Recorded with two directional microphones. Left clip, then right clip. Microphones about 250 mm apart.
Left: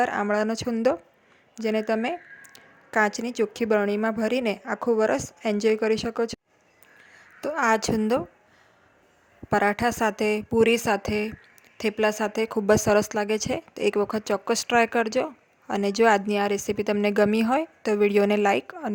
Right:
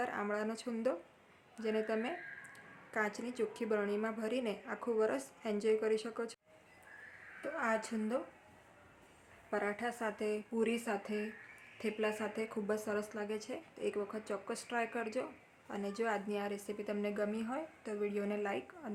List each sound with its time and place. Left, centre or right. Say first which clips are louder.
0.0 s speech: left 14 dB; left
7.4 s speech: left 14 dB; left
9.5 s speech: left 15 dB; left